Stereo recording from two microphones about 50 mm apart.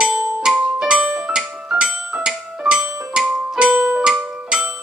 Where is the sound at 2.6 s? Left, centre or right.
Centre.